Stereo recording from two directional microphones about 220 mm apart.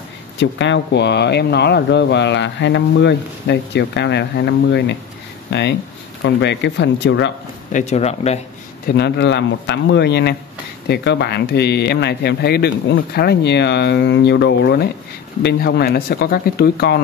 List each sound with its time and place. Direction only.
0.4 s speech: 55° left (ahead or behind)
7.7 s speech: 30° left (ahead or behind)
8.8 s speech: 50° left (ahead or behind)